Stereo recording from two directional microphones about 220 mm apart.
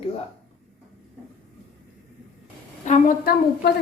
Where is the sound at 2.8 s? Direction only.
35° left (ahead or behind).